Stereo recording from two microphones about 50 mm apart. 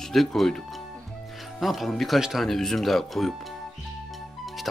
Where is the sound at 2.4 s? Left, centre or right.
Centre.